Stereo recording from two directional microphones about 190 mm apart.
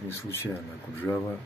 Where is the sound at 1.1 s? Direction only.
15° left (ahead or behind).